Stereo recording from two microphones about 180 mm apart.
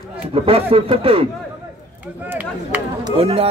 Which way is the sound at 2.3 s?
10° right (ahead or behind).